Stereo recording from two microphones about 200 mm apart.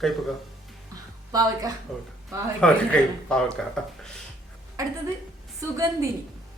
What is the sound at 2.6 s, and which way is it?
Speech, 5° left (ahead or behind).